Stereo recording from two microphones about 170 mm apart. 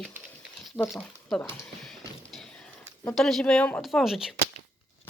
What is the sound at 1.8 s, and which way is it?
Music, centre (ahead or behind).